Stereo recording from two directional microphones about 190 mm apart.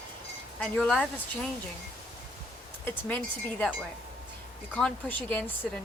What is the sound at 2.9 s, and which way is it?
Speech, 10° left (ahead or behind).